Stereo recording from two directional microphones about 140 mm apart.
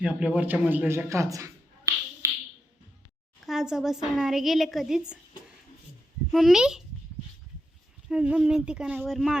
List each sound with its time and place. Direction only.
0.0 s a man's voice: 10° right (ahead or behind)
2.2 s a sound: 20° right (ahead or behind)
3.4 s a woman's voice: centre (ahead or behind)
6.3 s a woman's voice: 5° right (ahead or behind)
8.1 s a woman's voice: 10° right (ahead or behind)